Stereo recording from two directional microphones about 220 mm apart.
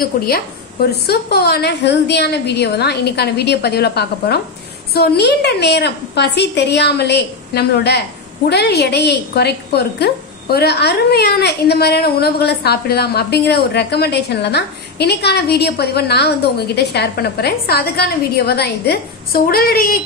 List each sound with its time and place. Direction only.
0.8 s a woman's voice: 45° left (ahead or behind)